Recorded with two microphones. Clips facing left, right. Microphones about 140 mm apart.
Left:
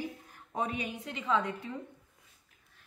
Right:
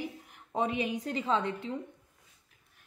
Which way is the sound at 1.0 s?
35° right (ahead or behind).